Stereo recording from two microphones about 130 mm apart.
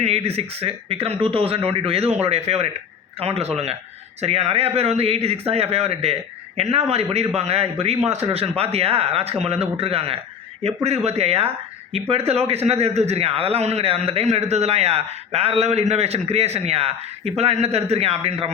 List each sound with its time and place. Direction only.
0.0 s speech: 50° right (ahead or behind)